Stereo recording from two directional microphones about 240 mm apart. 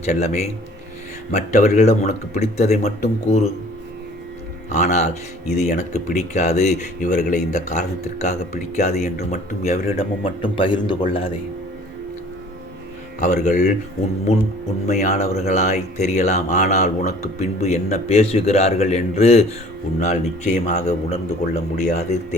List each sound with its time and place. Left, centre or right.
0.0 s speech: left
4.7 s speech: left
13.1 s speech: left
14.8 s speech: left